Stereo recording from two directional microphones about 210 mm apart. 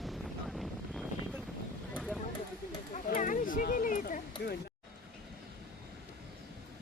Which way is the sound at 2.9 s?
40° left (ahead or behind).